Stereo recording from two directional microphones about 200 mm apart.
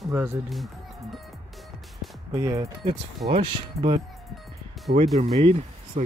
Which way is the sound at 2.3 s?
20° right (ahead or behind).